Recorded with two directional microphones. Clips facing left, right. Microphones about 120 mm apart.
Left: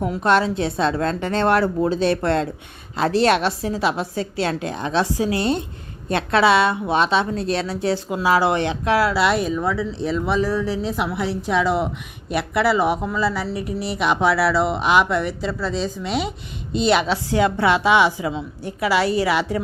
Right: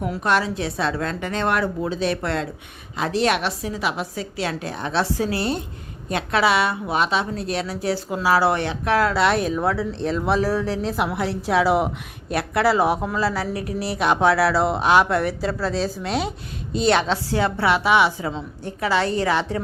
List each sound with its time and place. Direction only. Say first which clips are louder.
0.0 s a woman's voice: left 3 dB; 25° left (ahead or behind); by 17.0 s centre (ahead or behind)
17.1 s a woman's voice: left 3 dB; 15° left (ahead or behind)